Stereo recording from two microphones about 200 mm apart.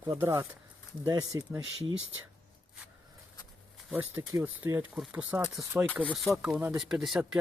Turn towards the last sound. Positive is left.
turn(degrees=0)  # may be behind; listen again after turning